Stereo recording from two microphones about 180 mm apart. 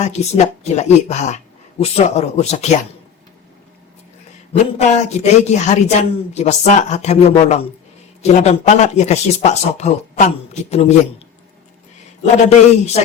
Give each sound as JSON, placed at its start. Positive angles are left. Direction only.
{"t": 0.0, "sound": "a man's voice", "side_deg": 40}
{"t": 4.5, "sound": "a man's voice", "side_deg": 40}
{"t": 12.5, "sound": "a man's voice", "side_deg": 40}